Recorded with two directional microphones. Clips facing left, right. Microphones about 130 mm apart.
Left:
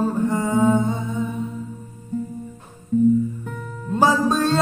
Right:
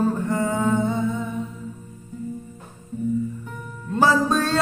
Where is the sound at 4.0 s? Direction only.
25° left (ahead or behind).